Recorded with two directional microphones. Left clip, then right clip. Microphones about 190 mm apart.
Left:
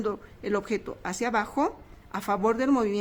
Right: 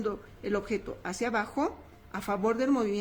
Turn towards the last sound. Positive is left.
turn(degrees=30)  # may be behind; listen again after turning